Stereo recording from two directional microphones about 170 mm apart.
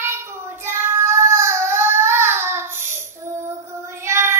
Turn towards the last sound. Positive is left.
turn(degrees=-15)  # may be behind; listen again after turning